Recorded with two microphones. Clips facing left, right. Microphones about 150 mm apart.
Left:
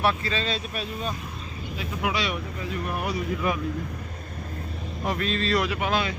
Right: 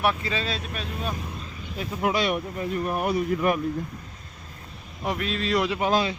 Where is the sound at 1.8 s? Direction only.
45° right (ahead or behind).